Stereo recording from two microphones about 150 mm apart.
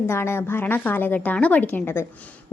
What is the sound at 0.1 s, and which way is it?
A woman's voice, 15° left (ahead or behind).